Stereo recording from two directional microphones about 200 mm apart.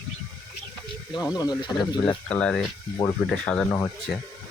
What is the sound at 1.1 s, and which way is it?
Speech, 20° left (ahead or behind).